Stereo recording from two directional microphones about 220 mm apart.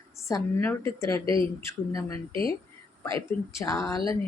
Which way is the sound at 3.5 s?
15° left (ahead or behind).